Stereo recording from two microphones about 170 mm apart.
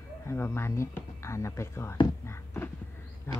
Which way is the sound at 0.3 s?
15° left (ahead or behind).